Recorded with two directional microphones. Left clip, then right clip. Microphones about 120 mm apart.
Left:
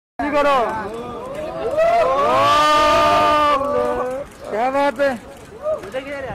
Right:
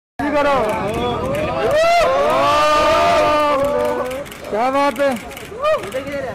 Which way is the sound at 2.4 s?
45° left (ahead or behind).